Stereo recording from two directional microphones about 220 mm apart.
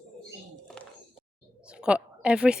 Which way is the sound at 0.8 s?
5° left (ahead or behind).